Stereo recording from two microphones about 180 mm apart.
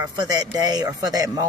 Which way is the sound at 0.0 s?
20° right (ahead or behind).